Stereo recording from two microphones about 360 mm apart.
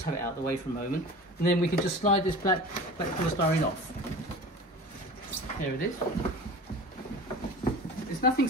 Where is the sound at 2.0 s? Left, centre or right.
Left.